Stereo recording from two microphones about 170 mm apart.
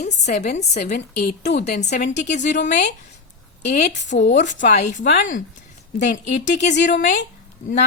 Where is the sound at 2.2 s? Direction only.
45° left (ahead or behind).